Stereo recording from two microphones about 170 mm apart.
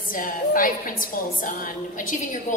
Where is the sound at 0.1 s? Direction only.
55° left (ahead or behind).